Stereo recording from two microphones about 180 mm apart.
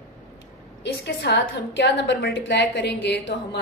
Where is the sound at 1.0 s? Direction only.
70° left (ahead or behind).